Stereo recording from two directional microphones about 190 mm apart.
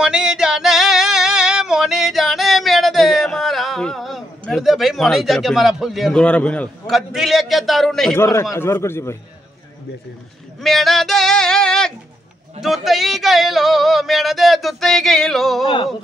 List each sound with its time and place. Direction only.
0.0 s music: 5° right (ahead or behind)
8.2 s a man's voice: 15° left (ahead or behind)
10.6 s speech: centre (ahead or behind)
12.6 s male singing: centre (ahead or behind)